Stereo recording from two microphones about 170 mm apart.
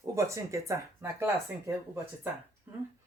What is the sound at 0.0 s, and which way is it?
Speech, 20° right (ahead or behind).